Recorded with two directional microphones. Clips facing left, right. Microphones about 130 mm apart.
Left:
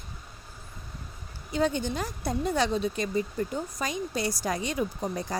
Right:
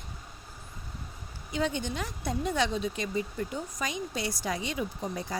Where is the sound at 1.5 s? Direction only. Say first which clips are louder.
Left 4 dB; 40° left (ahead or behind).